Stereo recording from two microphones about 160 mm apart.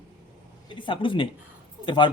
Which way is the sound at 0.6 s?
30° left (ahead or behind).